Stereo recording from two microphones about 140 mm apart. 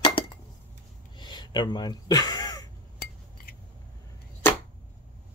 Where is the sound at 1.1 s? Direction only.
35° left (ahead or behind).